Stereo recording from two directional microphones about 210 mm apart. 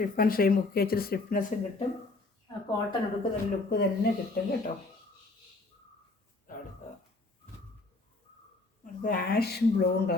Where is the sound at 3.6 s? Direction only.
45° left (ahead or behind).